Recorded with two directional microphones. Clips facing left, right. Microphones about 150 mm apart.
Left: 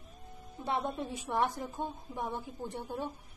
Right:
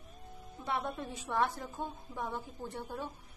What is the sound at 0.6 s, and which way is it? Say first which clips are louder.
A woman's voice: left 3 dB; 20° left (ahead or behind).